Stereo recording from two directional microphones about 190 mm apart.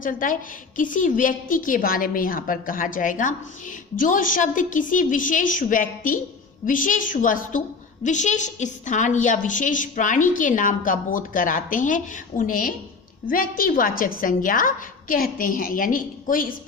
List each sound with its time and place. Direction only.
0.0 s a woman's voice: 45° left (ahead or behind)